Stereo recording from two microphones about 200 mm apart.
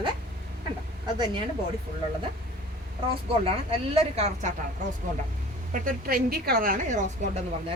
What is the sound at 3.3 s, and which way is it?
Speech, 30° right (ahead or behind).